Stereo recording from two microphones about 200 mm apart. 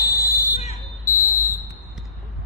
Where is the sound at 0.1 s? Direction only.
15° left (ahead or behind).